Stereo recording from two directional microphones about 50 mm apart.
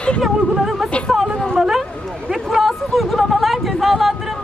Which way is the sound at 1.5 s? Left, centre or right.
Centre.